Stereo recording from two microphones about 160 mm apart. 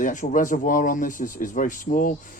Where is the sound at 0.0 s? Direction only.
50° left (ahead or behind).